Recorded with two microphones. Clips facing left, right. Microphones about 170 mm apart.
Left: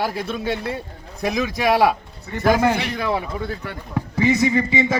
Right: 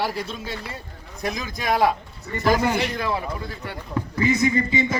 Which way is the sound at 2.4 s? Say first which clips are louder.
Left 3 dB; 55° left (ahead or behind).